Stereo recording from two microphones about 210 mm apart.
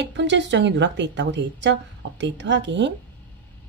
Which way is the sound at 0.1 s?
60° right (ahead or behind).